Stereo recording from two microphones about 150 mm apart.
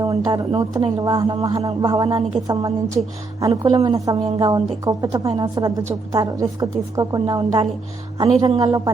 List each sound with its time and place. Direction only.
0.0 s speech: 25° right (ahead or behind)